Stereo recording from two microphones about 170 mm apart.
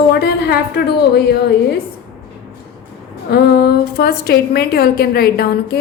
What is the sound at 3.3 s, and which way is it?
A woman's voice, 70° left (ahead or behind).